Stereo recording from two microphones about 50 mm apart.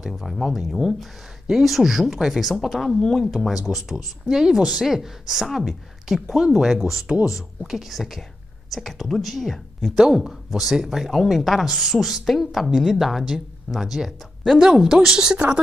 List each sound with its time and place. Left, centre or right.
0.0 s speech: centre
14.6 s speech: centre